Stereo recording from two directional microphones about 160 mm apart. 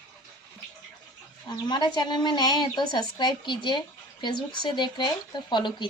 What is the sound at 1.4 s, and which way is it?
Speech, 25° left (ahead or behind).